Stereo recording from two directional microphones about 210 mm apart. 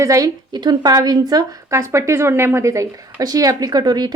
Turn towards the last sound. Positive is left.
turn(degrees=-20)  # may be behind; listen again after turning